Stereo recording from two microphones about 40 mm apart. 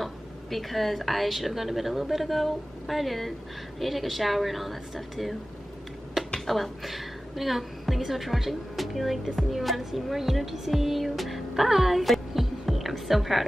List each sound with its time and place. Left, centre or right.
0.0 s a woman's voice: centre
6.4 s a woman's voice: centre